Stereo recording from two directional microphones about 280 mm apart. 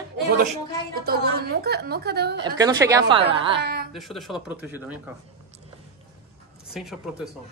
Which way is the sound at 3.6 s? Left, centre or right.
Right.